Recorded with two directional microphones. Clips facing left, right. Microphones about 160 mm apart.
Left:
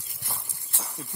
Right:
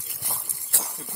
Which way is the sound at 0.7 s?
75° right (ahead or behind).